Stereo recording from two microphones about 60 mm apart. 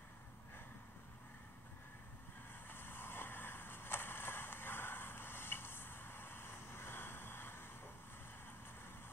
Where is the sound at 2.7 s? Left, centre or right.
Left.